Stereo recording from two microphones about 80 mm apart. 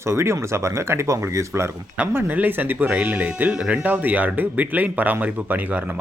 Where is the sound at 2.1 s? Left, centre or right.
Right.